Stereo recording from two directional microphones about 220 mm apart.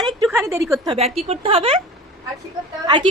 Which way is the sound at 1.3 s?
25° right (ahead or behind).